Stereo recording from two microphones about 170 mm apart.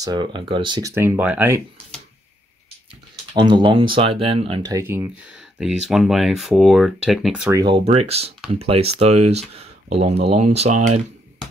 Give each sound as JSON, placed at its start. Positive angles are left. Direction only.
{"t": 0.0, "sound": "speech", "side_deg": -25}
{"t": 3.3, "sound": "speech", "side_deg": -25}
{"t": 4.7, "sound": "speech", "side_deg": -15}
{"t": 5.6, "sound": "speech", "side_deg": 0}
{"t": 7.5, "sound": "speech", "side_deg": -30}